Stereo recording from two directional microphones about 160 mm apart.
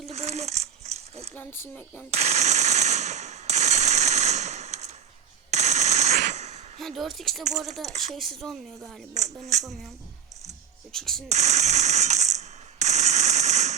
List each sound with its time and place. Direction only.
0.1 s coin: 40° right (ahead or behind)
1.4 s speech: 15° left (ahead or behind)
2.0 s machine gun: 40° right (ahead or behind)
6.7 s speech: centre (ahead or behind)
7.9 s speech: 40° right (ahead or behind)
8.1 s speech: centre (ahead or behind)
9.1 s speech: 45° right (ahead or behind)
10.9 s speech: 5° left (ahead or behind)
11.3 s coin: 45° right (ahead or behind)